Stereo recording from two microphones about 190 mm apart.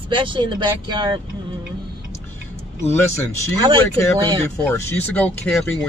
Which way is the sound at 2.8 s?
15° left (ahead or behind).